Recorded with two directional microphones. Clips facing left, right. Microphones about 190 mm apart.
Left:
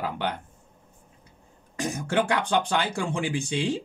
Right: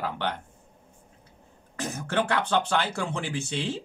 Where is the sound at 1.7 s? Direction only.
10° left (ahead or behind).